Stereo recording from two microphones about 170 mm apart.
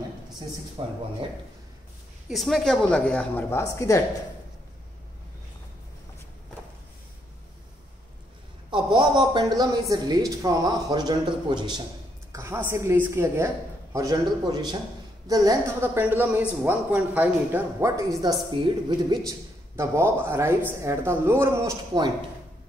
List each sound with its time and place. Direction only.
0.8 s speech: 30° right (ahead or behind)
2.2 s a woman's voice: centre (ahead or behind); by 4.0 s 20° left (ahead or behind)
8.6 s speech: 30° right (ahead or behind)
12.3 s speech: 15° right (ahead or behind)